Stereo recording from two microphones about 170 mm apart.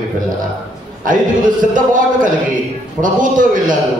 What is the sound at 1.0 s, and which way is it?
A man's voice, 50° right (ahead or behind).